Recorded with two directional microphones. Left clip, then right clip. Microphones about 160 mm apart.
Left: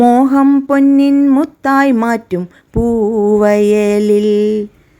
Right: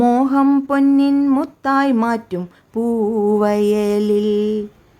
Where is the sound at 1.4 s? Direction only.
25° left (ahead or behind).